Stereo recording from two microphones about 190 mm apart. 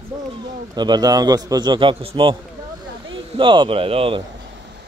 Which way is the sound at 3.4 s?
25° right (ahead or behind).